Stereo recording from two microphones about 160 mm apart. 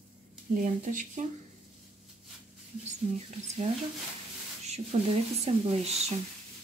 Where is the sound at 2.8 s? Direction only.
45° right (ahead or behind).